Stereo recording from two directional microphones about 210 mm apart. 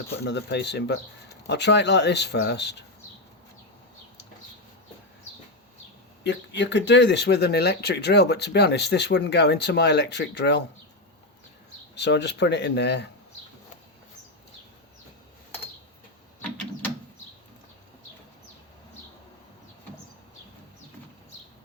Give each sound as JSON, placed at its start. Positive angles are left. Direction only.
{"t": 0.3, "sound": "speech", "side_deg": 55}
{"t": 6.2, "sound": "speech", "side_deg": 55}
{"t": 11.9, "sound": "speech", "side_deg": 55}